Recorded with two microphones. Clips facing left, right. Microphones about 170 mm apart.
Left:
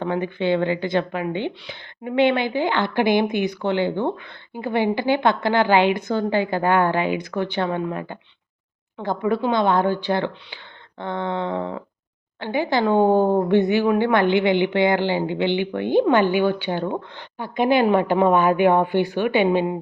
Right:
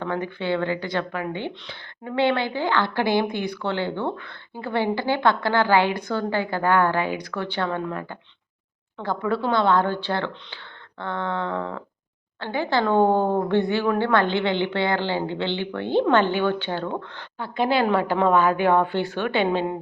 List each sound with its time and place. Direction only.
0.0 s speech: 20° left (ahead or behind)